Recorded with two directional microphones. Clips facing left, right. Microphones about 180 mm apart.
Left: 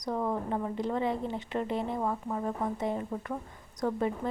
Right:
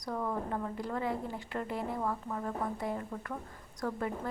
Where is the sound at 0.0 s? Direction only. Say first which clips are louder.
Left 4 dB; 20° left (ahead or behind).